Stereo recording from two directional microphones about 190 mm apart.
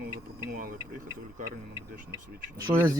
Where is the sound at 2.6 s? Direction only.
20° right (ahead or behind).